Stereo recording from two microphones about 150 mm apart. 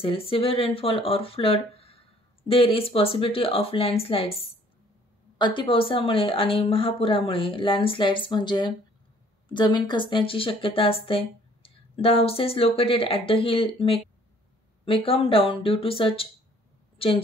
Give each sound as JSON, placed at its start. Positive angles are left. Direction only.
{"t": 0.0, "sound": "a woman's voice", "side_deg": 40}